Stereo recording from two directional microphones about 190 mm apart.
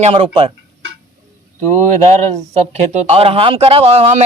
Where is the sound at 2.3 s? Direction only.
35° right (ahead or behind).